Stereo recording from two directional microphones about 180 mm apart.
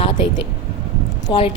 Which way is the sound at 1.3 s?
30° left (ahead or behind).